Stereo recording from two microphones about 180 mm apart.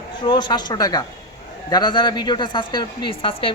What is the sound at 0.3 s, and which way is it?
A woman's voice, 25° left (ahead or behind).